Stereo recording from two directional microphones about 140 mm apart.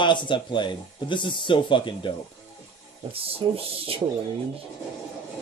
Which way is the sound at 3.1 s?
40° right (ahead or behind).